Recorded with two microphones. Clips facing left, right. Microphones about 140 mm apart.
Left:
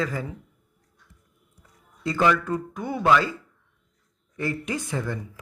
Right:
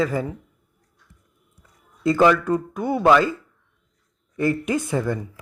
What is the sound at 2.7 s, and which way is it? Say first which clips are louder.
Speech: right 4 dB; 20° right (ahead or behind).